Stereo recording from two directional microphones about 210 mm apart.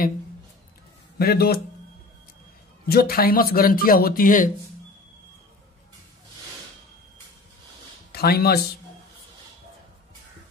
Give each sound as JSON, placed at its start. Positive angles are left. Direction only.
{"t": 1.1, "sound": "speech", "side_deg": 50}
{"t": 2.9, "sound": "speech", "side_deg": 45}
{"t": 8.1, "sound": "speech", "side_deg": 50}